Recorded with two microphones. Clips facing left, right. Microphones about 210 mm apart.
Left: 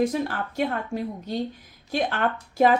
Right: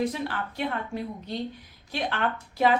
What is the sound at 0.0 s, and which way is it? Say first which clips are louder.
Speech: left 4 dB; 45° left (ahead or behind).